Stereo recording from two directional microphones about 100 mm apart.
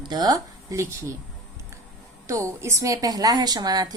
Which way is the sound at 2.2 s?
30° right (ahead or behind).